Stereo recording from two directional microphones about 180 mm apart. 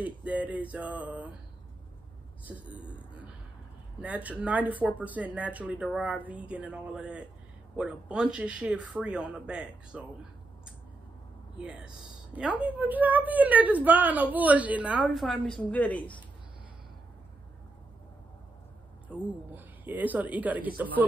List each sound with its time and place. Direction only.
0.0 s a sound: 5° right (ahead or behind)
4.0 s a woman's voice: 10° right (ahead or behind)
11.5 s a woman's voice: 5° right (ahead or behind)
19.0 s a woman's voice: 10° right (ahead or behind)